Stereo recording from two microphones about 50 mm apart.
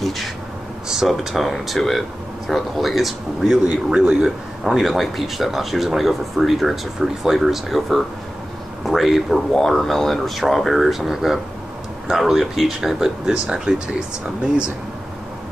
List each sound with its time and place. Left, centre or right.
0.8 s speech: centre
1.1 s speech: centre
3.6 s speech: centre
4.7 s speech: centre